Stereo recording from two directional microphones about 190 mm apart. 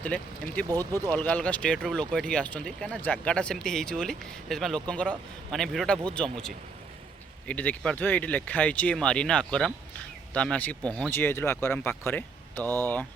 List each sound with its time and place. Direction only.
0.0 s speech: 10° left (ahead or behind)
0.7 s speech: 20° right (ahead or behind)
1.1 s speech: 10° left (ahead or behind)